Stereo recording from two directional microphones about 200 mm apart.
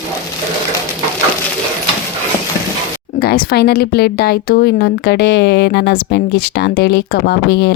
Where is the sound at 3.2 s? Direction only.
50° left (ahead or behind).